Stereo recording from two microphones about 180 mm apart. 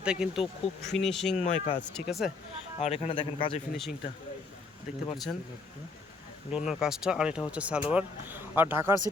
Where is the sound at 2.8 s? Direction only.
35° left (ahead or behind).